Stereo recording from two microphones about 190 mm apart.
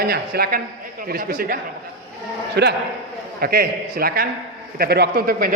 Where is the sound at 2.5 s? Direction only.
60° right (ahead or behind).